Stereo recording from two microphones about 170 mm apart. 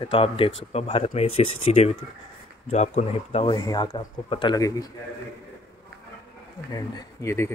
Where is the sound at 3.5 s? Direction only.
25° left (ahead or behind).